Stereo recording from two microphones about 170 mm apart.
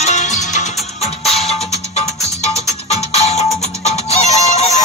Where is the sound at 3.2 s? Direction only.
40° left (ahead or behind).